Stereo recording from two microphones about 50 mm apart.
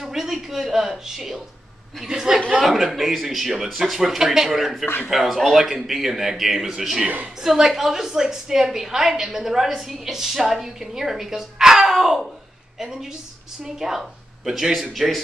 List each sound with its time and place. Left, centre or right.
0.0 s a woman's voice: centre
4.8 s speech: left
5.1 s a woman's voice: centre
13.7 s speech: centre